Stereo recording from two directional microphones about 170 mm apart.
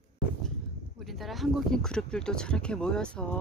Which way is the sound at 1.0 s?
Centre (ahead or behind).